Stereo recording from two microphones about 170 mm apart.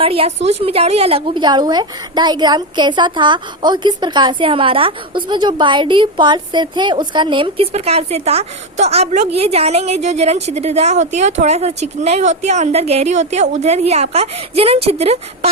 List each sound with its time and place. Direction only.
0.0 s a woman's voice: 35° right (ahead or behind)